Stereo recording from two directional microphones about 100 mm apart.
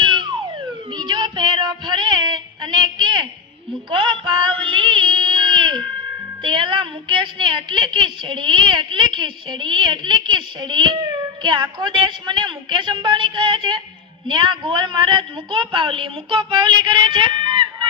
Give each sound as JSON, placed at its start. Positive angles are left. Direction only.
{"t": 0.0, "sound": "a sound", "side_deg": -55}
{"t": 0.9, "sound": "child singing", "side_deg": -45}
{"t": 3.8, "sound": "music", "side_deg": -50}
{"t": 6.4, "sound": "a woman's voice", "side_deg": -55}